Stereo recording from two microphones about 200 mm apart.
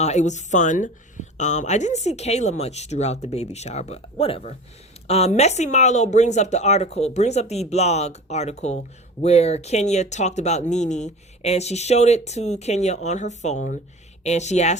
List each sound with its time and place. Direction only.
0.0 s speech: 35° left (ahead or behind)